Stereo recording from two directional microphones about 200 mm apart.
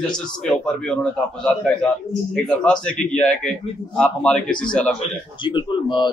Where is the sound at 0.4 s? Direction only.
5° left (ahead or behind).